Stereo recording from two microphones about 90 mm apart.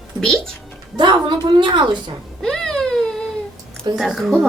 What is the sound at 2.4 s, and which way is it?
Baby cry, 5° left (ahead or behind).